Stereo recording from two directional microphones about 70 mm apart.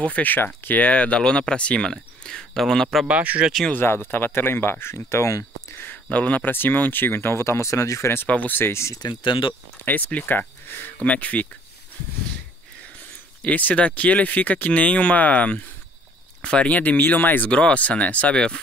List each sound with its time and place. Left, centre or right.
0.0 s speech: left; by 3.1 s centre
3.1 s speech: centre
3.7 s speech: left
6.0 s speech: left
8.3 s speech: left
8.9 s speech: left
9.8 s speech: left
13.4 s speech: left
17.5 s speech: centre